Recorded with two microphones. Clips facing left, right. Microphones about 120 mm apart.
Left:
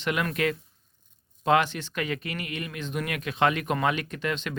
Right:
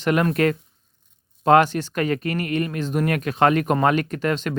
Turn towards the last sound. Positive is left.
turn(degrees=-45)  # may be behind; listen again after turning